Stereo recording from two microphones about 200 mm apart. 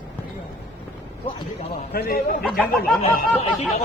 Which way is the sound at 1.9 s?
50° left (ahead or behind).